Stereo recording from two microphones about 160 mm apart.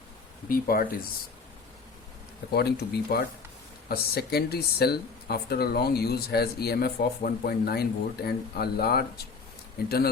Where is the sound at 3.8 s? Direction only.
75° left (ahead or behind).